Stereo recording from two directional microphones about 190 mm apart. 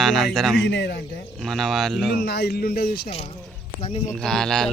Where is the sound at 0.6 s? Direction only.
70° left (ahead or behind).